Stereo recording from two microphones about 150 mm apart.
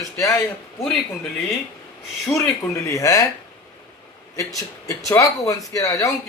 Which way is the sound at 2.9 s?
20° left (ahead or behind).